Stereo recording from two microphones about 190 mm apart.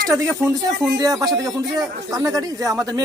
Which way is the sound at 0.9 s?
20° right (ahead or behind).